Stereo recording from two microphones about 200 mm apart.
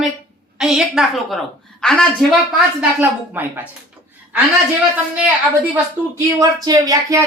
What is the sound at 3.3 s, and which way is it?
Speech, 10° right (ahead or behind).